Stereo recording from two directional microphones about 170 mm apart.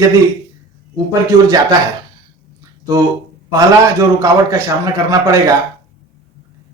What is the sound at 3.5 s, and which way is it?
A man's voice, 15° right (ahead or behind).